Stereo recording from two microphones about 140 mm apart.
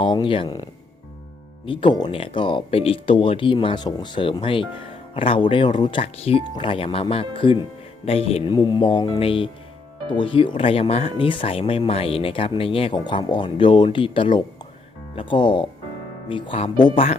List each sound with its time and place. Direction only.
0.0 s speech: 35° left (ahead or behind)
1.6 s speech: 35° left (ahead or behind)
8.4 s speech: 30° left (ahead or behind)